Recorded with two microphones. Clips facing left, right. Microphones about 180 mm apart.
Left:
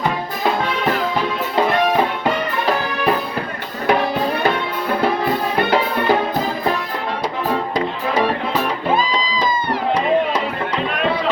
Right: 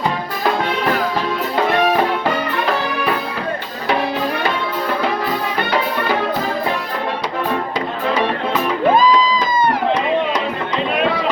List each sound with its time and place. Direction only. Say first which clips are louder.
9.0 s music: right 6 dB; 45° right (ahead or behind)